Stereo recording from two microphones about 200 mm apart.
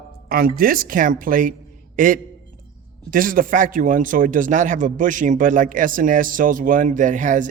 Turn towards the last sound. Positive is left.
turn(degrees=-40)  # may be behind; listen again after turning